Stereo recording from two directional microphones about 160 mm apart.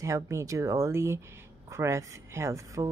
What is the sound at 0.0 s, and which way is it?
Speech, 20° right (ahead or behind).